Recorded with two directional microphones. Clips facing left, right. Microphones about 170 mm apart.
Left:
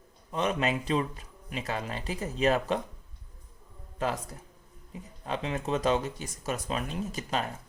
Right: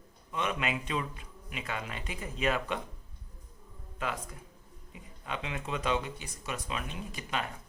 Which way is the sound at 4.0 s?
40° left (ahead or behind).